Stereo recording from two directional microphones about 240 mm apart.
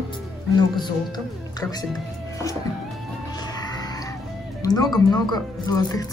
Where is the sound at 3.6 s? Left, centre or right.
Centre.